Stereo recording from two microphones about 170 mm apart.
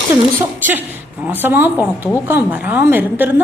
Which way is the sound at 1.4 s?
10° right (ahead or behind).